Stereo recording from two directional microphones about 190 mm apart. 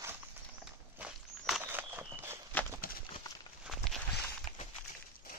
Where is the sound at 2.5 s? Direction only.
10° left (ahead or behind).